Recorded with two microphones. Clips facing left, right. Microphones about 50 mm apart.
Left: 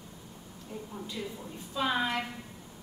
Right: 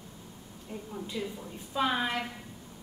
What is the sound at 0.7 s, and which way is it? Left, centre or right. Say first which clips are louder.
A woman's voice: right 2 dB; centre.